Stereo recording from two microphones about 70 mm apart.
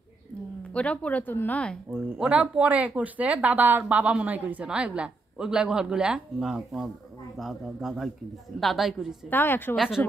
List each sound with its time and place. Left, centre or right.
0.7 s speech: centre
1.3 s a woman's voice: left
2.1 s speech: centre
9.3 s speech: left
9.8 s speech: centre